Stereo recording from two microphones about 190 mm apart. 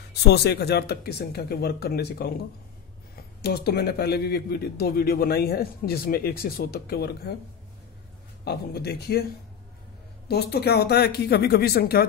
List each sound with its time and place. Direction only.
0.2 s a man's voice: 60° left (ahead or behind)
3.4 s a man's voice: 55° left (ahead or behind)
8.5 s a man's voice: 55° left (ahead or behind)
10.2 s a man's voice: 55° left (ahead or behind)